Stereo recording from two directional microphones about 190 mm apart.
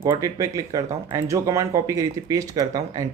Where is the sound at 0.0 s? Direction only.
15° right (ahead or behind).